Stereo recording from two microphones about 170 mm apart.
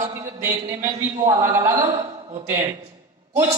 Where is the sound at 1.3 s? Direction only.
20° right (ahead or behind).